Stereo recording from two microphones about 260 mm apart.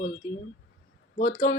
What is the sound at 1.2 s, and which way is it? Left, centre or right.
Speech, left.